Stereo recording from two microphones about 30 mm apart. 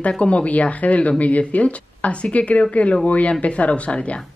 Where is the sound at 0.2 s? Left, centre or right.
Left.